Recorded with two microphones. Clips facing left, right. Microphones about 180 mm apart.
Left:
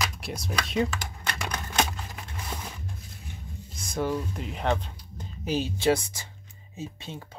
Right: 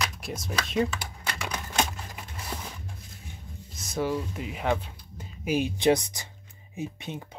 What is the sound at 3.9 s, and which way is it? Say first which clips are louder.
Speech: even; 5° right (ahead or behind).